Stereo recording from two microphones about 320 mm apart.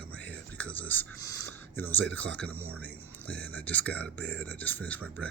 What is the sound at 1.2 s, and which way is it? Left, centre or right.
Speech, left.